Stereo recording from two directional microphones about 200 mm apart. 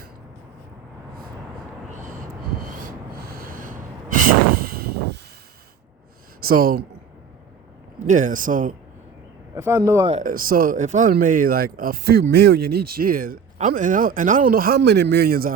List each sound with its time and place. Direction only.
1.9 s vehicle: 40° right (ahead or behind)
3.2 s a sound: 45° right (ahead or behind)
6.4 s speech: 45° right (ahead or behind)
7.9 s a man's voice: 40° right (ahead or behind)
9.6 s speech: 10° right (ahead or behind)
10.1 s speech: 40° right (ahead or behind)
14.8 s a man's voice: 60° right (ahead or behind)